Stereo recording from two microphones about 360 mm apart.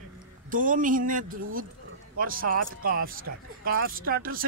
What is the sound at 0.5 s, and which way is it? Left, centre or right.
Speech, right.